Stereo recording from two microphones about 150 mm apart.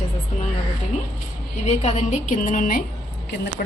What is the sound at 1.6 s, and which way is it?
A woman's voice, 45° left (ahead or behind).